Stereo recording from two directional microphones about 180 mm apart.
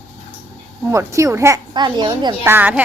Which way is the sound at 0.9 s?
15° right (ahead or behind).